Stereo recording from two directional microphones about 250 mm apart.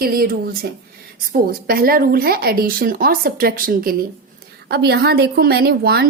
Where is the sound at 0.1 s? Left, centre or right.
Right.